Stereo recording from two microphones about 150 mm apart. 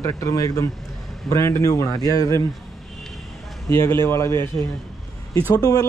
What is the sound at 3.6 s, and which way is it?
Speech, 20° left (ahead or behind).